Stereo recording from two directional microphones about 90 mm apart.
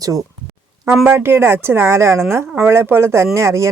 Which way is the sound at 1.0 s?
25° right (ahead or behind).